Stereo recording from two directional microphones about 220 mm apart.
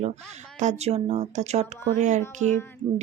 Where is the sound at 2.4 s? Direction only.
10° left (ahead or behind).